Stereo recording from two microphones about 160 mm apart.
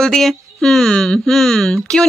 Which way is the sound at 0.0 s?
Centre (ahead or behind).